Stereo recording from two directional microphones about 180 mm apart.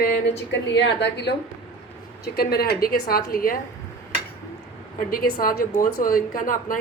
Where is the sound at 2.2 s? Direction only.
60° left (ahead or behind).